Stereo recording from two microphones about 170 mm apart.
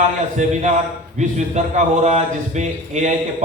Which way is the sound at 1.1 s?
45° right (ahead or behind).